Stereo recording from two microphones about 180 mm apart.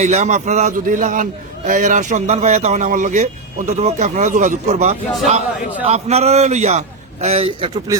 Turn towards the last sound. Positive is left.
turn(degrees=-30)  # may be behind; listen again after turning